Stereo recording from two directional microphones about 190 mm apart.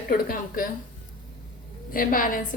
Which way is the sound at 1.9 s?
45° left (ahead or behind).